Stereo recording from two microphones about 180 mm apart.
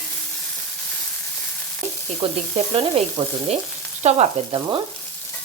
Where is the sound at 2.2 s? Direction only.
30° right (ahead or behind).